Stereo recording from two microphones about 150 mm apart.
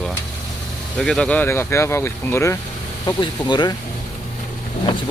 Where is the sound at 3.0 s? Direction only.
30° left (ahead or behind).